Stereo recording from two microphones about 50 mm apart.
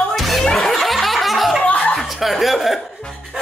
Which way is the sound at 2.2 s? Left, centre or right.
Centre.